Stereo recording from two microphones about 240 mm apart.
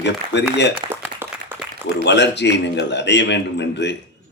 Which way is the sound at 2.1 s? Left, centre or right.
Left.